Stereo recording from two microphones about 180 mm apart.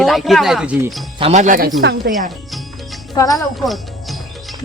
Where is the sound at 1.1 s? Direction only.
35° right (ahead or behind).